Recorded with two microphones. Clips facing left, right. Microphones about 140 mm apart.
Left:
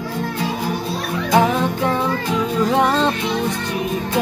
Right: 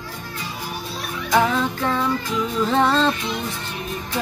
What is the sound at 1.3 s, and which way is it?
Music, 20° left (ahead or behind).